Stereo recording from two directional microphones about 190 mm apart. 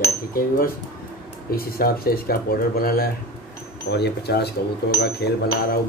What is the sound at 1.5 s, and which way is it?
Speech, 50° left (ahead or behind).